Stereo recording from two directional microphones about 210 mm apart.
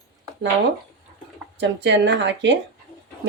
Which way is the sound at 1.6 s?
55° right (ahead or behind).